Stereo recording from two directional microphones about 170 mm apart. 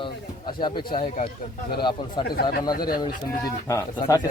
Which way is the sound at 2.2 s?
65° left (ahead or behind).